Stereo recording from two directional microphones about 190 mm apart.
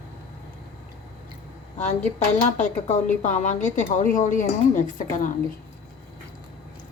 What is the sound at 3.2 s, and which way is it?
A woman's voice, 40° left (ahead or behind).